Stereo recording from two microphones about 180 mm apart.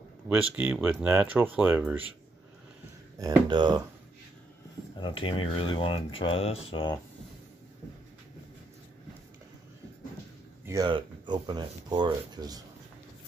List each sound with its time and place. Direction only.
0.3 s speech: 5° right (ahead or behind)
3.2 s speech: 20° right (ahead or behind)
4.9 s speech: 25° left (ahead or behind)
10.6 s a sound: 15° right (ahead or behind)
10.9 s speech: 25° right (ahead or behind)